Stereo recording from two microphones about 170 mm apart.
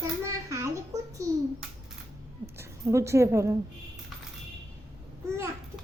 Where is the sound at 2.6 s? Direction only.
15° right (ahead or behind).